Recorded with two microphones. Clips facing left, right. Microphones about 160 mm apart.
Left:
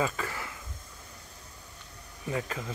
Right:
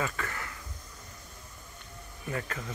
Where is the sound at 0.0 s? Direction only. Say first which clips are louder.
Left 3 dB; 20° left (ahead or behind).